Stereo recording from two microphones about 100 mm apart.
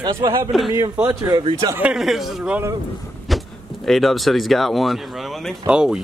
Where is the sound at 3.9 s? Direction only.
Centre (ahead or behind).